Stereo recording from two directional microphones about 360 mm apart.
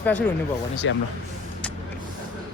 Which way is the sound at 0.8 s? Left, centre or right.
Left.